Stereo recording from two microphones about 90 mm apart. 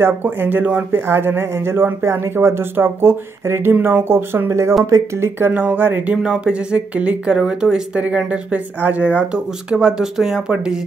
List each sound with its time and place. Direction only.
0.0 s speech: 20° right (ahead or behind)
5.4 s speech: 20° right (ahead or behind)
6.1 s speech: 5° right (ahead or behind)